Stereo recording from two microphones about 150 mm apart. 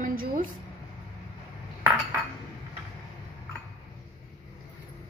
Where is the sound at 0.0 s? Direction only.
70° right (ahead or behind).